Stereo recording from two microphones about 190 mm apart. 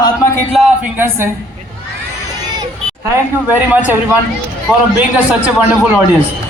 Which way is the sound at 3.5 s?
10° right (ahead or behind).